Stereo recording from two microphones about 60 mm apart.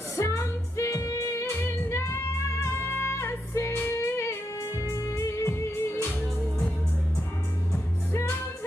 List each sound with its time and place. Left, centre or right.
0.1 s music: left